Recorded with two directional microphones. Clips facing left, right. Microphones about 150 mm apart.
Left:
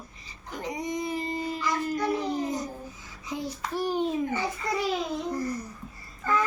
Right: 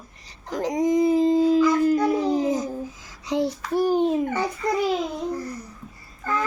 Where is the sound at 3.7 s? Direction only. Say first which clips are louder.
Right 7 dB; 50° right (ahead or behind).